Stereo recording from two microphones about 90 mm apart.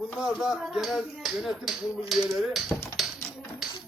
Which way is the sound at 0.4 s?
5° right (ahead or behind).